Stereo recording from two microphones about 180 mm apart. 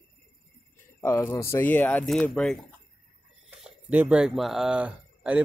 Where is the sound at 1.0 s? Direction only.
15° left (ahead or behind).